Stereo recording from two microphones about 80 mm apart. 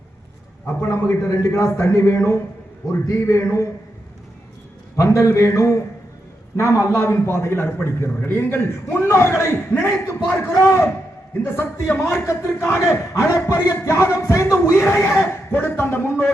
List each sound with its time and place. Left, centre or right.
0.8 s a man's voice: left
4.9 s a man's voice: left